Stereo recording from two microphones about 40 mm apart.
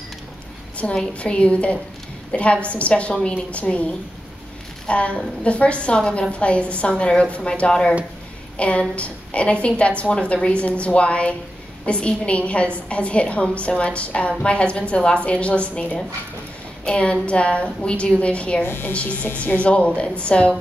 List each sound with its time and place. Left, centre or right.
0.8 s a woman's voice: left
18.6 s speech: left
19.3 s a woman's voice: left